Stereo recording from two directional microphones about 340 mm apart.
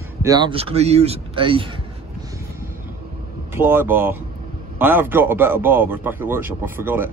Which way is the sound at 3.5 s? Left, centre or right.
Centre.